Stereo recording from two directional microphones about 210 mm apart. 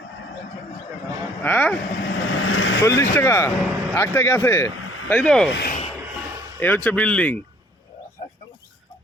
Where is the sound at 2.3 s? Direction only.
80° left.